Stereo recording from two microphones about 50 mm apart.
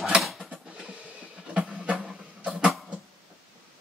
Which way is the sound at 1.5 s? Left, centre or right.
Right.